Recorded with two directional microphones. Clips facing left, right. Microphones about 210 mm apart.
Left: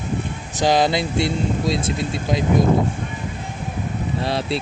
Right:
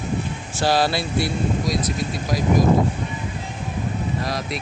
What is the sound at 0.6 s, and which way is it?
Speech, 20° left (ahead or behind).